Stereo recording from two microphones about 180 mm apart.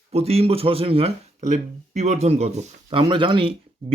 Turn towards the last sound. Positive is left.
turn(degrees=-30)  # may be behind; listen again after turning